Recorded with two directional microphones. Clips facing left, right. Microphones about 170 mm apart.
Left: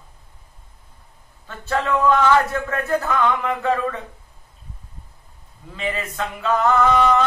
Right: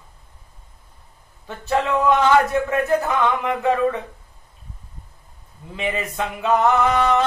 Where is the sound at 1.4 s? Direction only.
20° right (ahead or behind).